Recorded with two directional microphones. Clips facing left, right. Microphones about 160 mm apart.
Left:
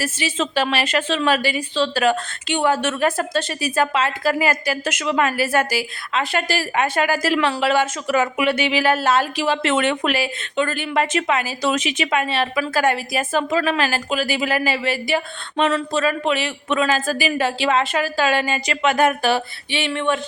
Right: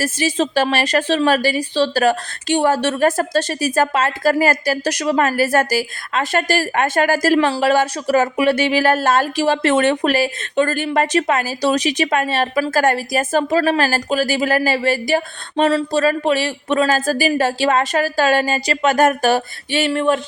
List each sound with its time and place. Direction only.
0.0 s a woman's voice: 40° right (ahead or behind)